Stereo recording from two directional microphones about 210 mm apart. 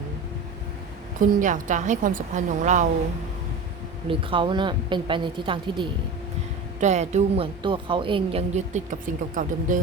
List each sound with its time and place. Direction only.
1.4 s a woman's voice: 35° right (ahead or behind)
4.1 s a woman's voice: 25° right (ahead or behind)
6.7 s a woman's voice: 35° right (ahead or behind)